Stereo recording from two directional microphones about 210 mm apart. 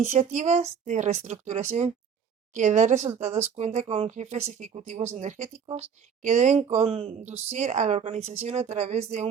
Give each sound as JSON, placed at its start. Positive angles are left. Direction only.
{"t": 0.0, "sound": "speech", "side_deg": -30}